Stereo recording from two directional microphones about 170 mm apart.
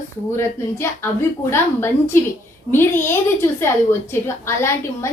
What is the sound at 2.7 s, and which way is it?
A woman's voice, 15° left (ahead or behind).